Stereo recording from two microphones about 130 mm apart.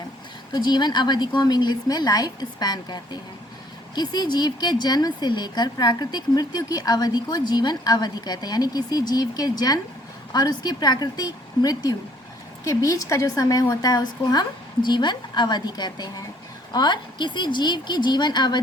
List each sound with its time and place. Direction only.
0.5 s speech: 35° left (ahead or behind)